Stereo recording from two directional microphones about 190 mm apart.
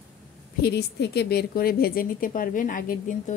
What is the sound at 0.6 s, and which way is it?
A woman's voice, 60° left (ahead or behind).